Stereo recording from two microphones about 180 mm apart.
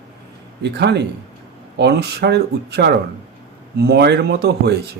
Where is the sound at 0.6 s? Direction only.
70° right (ahead or behind).